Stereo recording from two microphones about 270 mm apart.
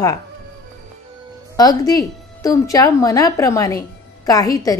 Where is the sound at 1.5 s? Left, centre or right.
Centre.